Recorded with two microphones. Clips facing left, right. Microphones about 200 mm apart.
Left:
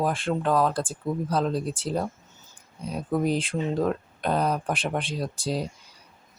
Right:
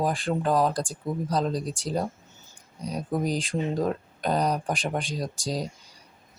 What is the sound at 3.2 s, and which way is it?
Speech, centre (ahead or behind).